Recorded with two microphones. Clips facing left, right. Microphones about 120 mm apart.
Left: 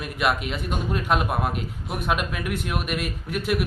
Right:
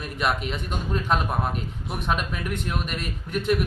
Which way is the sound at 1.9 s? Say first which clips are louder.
Left 1 dB; 5° left (ahead or behind).